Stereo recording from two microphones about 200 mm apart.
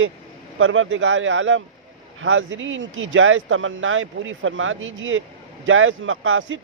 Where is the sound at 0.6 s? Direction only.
85° right.